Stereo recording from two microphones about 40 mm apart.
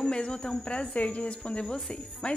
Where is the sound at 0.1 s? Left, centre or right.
Left.